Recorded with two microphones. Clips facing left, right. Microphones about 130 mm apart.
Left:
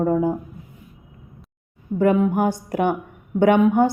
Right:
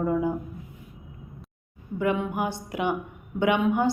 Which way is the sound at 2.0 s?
45° left (ahead or behind).